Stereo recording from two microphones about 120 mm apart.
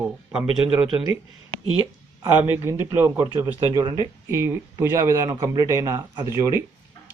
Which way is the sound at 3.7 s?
35° right (ahead or behind).